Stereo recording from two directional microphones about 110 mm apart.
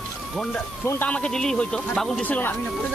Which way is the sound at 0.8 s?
25° left (ahead or behind).